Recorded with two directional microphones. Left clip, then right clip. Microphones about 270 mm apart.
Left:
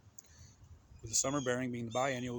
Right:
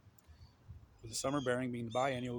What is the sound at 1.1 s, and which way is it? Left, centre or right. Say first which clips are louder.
Speech: left 1 dB; centre.